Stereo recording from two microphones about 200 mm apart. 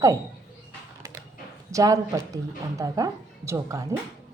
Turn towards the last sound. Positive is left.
turn(degrees=-15)  # may be behind; listen again after turning